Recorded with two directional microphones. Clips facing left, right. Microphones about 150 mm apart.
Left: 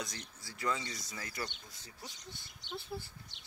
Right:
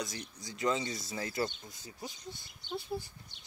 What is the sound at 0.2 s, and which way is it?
Speech, 20° right (ahead or behind).